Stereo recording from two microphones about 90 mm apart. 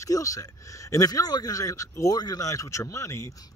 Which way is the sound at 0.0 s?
40° left (ahead or behind).